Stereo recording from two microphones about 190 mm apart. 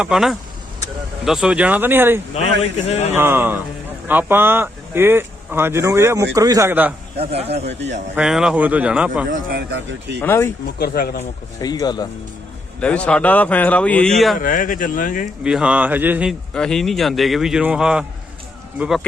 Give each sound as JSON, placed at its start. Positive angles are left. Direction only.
{"t": 0.0, "sound": "a man's voice", "side_deg": 0}
{"t": 2.8, "sound": "speech", "side_deg": 35}
{"t": 3.2, "sound": "speech", "side_deg": -10}
{"t": 7.2, "sound": "speech", "side_deg": -30}
{"t": 7.7, "sound": "speech", "side_deg": -70}
{"t": 8.1, "sound": "a man's voice", "side_deg": -5}
{"t": 9.3, "sound": "speech", "side_deg": -55}
{"t": 10.2, "sound": "speech", "side_deg": 10}
{"t": 10.8, "sound": "speech", "side_deg": 55}
{"t": 11.6, "sound": "speech", "side_deg": 20}
{"t": 12.8, "sound": "speech", "side_deg": 5}
{"t": 14.3, "sound": "speech", "side_deg": 45}
{"t": 15.4, "sound": "speech", "side_deg": -5}
{"t": 16.6, "sound": "a man's voice", "side_deg": 5}